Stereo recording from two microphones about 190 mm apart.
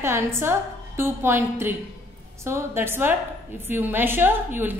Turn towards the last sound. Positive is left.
turn(degrees=-10)  # may be behind; listen again after turning